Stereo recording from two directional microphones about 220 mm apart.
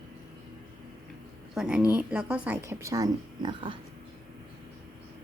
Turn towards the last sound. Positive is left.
turn(degrees=-20)  # may be behind; listen again after turning